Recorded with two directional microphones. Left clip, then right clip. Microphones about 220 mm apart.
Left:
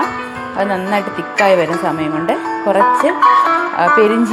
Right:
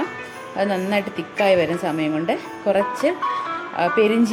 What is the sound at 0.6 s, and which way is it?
A woman's voice, 5° left (ahead or behind).